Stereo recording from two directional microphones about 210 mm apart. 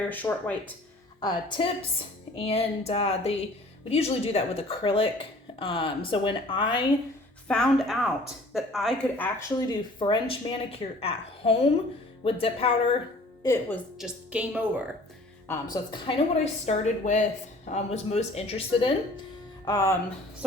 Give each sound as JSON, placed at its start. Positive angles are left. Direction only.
{"t": 0.1, "sound": "speech", "side_deg": 10}
{"t": 1.2, "sound": "speech", "side_deg": 20}
{"t": 7.4, "sound": "a woman's voice", "side_deg": 5}
{"t": 13.4, "sound": "speech", "side_deg": 15}
{"t": 14.0, "sound": "a woman's voice", "side_deg": -5}
{"t": 15.4, "sound": "speech", "side_deg": 20}